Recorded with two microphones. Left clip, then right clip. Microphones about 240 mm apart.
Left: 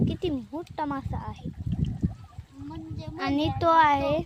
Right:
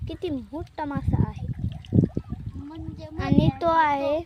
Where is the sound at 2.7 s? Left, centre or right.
Centre.